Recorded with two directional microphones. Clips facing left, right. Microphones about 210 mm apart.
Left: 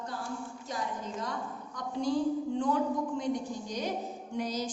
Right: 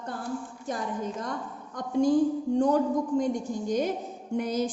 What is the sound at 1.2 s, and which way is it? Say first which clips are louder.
A woman's voice: right 2 dB; 50° right (ahead or behind).